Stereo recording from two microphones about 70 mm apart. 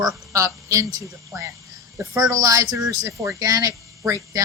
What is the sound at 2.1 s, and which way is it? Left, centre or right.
Speech, right.